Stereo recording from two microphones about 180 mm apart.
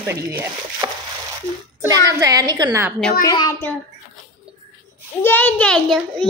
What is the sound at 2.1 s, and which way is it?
Speech, 20° right (ahead or behind).